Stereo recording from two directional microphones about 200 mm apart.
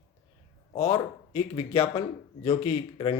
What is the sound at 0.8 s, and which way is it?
Speech, 20° left (ahead or behind).